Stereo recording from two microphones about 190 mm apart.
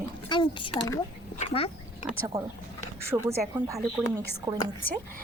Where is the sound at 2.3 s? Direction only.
15° right (ahead or behind).